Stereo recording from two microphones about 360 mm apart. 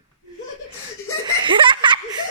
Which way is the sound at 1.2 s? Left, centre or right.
Centre.